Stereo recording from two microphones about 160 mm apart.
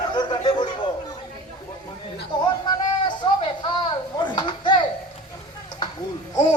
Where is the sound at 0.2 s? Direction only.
25° left (ahead or behind).